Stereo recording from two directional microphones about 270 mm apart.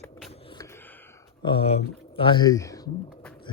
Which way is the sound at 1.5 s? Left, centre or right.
Left.